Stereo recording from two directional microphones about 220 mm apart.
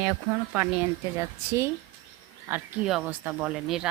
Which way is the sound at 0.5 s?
10° right (ahead or behind).